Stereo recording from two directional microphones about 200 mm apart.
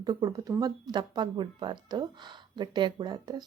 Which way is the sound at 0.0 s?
20° right (ahead or behind).